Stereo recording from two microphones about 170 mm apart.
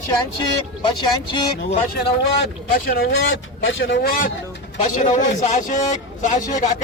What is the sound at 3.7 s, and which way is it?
Speech, 90° left.